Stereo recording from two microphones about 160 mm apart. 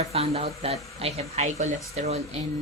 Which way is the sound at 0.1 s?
40° right (ahead or behind).